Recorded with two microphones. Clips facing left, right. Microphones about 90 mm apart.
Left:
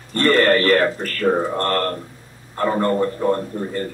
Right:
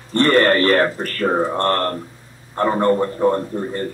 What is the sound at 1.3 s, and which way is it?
A man's voice, 25° right (ahead or behind).